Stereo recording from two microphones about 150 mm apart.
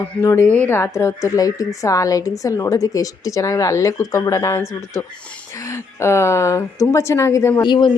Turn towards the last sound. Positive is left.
turn(degrees=30)  # may be behind; listen again after turning